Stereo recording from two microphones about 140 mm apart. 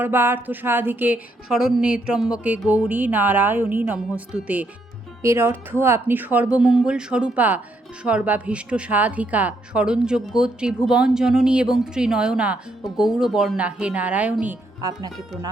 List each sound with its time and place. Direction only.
0.0 s a woman's voice: 15° right (ahead or behind)
14.8 s speech: 25° right (ahead or behind)